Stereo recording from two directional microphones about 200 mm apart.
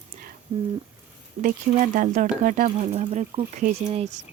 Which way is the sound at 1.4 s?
40° right (ahead or behind).